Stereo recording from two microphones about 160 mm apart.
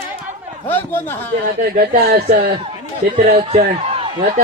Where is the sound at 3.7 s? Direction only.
35° right (ahead or behind).